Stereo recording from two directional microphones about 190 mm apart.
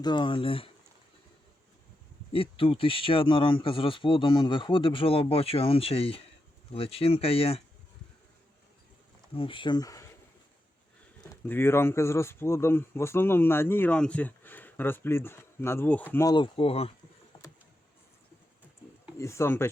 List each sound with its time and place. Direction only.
0.0 s speech: 25° left (ahead or behind)
2.3 s speech: 30° left (ahead or behind)
9.3 s speech: 30° left (ahead or behind)
11.2 s speech: 15° left (ahead or behind)
16.1 s speech: 20° left (ahead or behind)
19.2 s speech: 15° left (ahead or behind)